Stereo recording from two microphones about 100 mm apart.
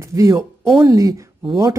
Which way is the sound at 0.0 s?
30° right (ahead or behind).